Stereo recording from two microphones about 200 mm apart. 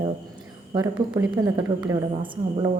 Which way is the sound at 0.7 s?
20° right (ahead or behind).